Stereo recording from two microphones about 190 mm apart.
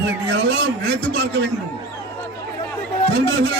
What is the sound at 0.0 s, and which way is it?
A man's voice, 65° right (ahead or behind).